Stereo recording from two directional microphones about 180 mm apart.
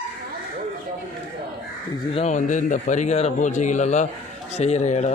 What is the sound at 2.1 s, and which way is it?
A man's voice, 35° left (ahead or behind).